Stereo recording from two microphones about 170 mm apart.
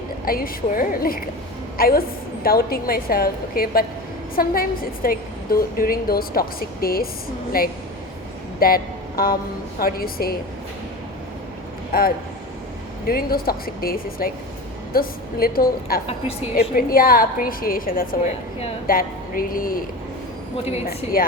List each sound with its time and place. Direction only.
0.3 s a woman's voice: 60° left (ahead or behind)
11.9 s a woman's voice: 60° left (ahead or behind)
20.8 s a woman's voice: 60° left (ahead or behind)